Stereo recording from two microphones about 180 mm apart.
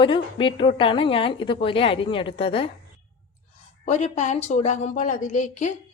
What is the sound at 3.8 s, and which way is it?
A woman's voice, 40° left (ahead or behind).